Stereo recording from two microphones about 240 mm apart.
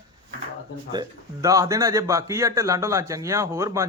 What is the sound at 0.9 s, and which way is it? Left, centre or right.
A man's voice, centre.